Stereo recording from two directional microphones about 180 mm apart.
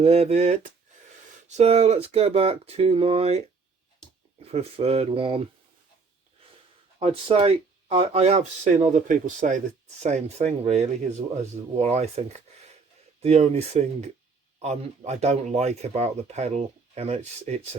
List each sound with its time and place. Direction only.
0.0 s speech: 35° right (ahead or behind)
4.5 s speech: 35° right (ahead or behind)
7.0 s speech: 30° right (ahead or behind)
13.2 s speech: 35° right (ahead or behind)